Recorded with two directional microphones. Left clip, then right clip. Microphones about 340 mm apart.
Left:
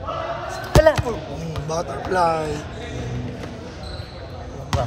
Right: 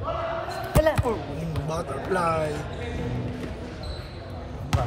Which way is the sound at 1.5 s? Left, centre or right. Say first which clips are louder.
Left 5 dB; centre.